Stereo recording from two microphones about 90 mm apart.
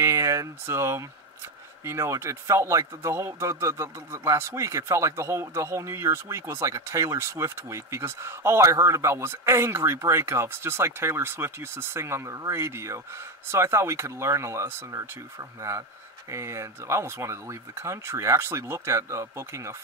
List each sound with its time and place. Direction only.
0.0 s speech: 35° right (ahead or behind)